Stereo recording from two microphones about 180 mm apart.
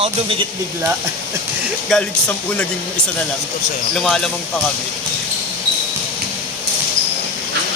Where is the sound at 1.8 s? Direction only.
5° left (ahead or behind).